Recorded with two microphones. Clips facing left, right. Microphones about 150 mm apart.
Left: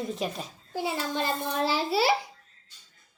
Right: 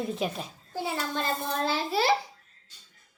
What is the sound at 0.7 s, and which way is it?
A child's voice, 15° left (ahead or behind).